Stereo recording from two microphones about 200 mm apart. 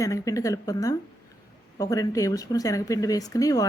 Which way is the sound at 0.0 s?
15° left (ahead or behind).